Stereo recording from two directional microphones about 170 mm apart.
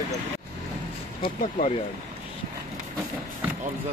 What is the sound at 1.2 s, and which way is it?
Speech, 50° left (ahead or behind).